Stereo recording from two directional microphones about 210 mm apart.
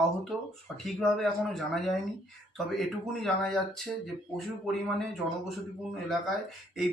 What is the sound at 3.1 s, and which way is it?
Speech, 5° left (ahead or behind).